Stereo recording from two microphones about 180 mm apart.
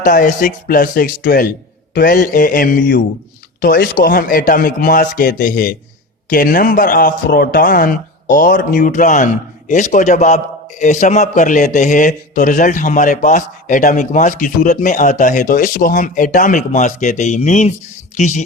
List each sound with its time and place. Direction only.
0.0 s a man's voice: 50° left (ahead or behind)